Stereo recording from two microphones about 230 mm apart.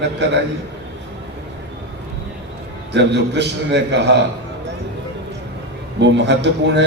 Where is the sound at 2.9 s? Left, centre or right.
Right.